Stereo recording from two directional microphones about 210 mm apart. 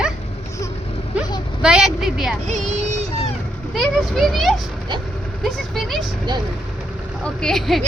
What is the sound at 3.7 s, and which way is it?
Speech, centre (ahead or behind).